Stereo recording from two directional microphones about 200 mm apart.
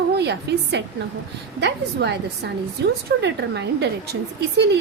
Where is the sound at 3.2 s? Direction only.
60° right (ahead or behind).